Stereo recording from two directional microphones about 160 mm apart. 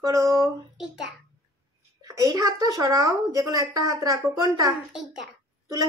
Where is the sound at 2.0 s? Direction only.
20° right (ahead or behind).